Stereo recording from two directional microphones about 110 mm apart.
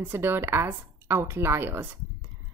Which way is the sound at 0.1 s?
20° right (ahead or behind).